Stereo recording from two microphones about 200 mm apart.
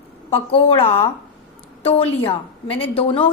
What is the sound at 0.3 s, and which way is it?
A woman's voice, 25° left (ahead or behind).